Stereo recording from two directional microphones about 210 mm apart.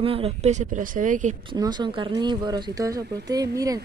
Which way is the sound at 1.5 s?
20° right (ahead or behind).